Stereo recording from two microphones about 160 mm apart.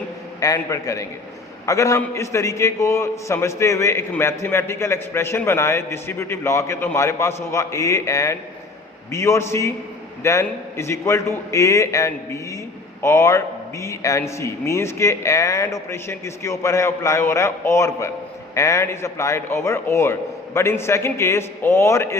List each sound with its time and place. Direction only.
0.3 s a man's voice: 20° left (ahead or behind)